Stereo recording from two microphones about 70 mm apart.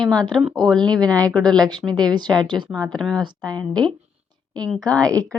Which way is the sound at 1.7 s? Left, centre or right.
Right.